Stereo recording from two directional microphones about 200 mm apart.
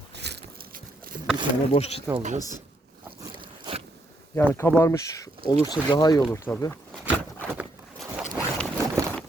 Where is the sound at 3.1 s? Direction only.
25° right (ahead or behind).